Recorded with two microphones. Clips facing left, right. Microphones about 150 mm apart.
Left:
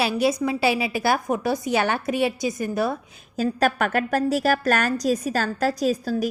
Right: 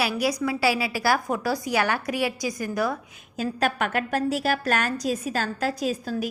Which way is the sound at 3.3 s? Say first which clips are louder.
Left 4 dB; 45° left (ahead or behind).